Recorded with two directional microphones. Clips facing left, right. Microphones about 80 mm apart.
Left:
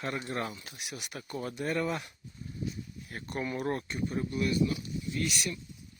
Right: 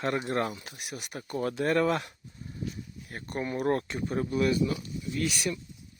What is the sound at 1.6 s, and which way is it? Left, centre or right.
Speech, right.